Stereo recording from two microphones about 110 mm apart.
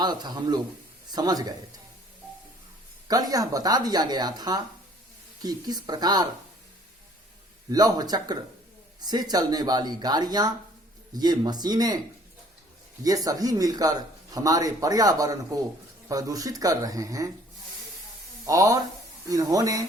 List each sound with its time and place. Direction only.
0.0 s speech: 40° right (ahead or behind)
3.1 s speech: 35° right (ahead or behind)
7.7 s speech: 35° right (ahead or behind)
13.2 s speech: 35° right (ahead or behind)
18.4 s speech: 30° right (ahead or behind)